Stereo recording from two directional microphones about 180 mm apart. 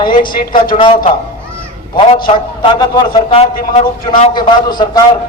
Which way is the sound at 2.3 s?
30° left (ahead or behind).